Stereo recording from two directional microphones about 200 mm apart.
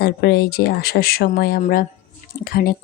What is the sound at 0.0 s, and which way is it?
Speech, 55° left (ahead or behind).